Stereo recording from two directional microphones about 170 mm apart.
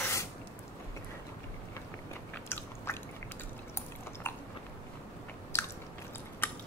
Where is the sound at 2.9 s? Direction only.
15° left (ahead or behind).